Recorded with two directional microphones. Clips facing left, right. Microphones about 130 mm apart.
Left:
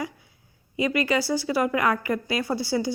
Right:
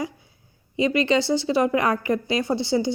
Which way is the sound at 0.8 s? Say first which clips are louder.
Right 3 dB; 25° right (ahead or behind).